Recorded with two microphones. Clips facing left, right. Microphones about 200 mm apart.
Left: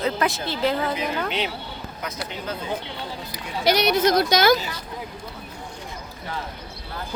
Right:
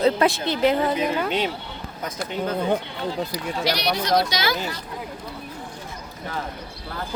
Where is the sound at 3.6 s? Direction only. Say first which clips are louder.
Left 7 dB; 50° left (ahead or behind).